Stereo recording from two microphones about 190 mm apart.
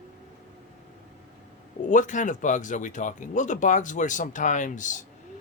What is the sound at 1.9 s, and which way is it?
Speech, 40° left (ahead or behind).